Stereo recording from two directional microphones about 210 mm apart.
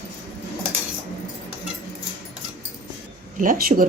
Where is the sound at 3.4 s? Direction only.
40° right (ahead or behind).